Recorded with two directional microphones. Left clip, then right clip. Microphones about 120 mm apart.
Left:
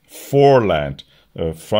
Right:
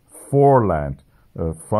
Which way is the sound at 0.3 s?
40° left (ahead or behind).